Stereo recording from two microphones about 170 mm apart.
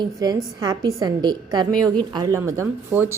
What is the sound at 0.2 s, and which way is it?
A woman's voice, 20° right (ahead or behind).